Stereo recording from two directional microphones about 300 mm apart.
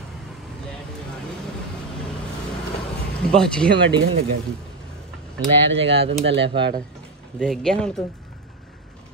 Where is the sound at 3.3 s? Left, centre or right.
Centre.